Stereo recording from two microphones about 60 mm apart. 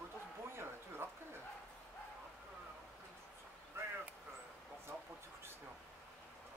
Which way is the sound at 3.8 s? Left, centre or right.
Right.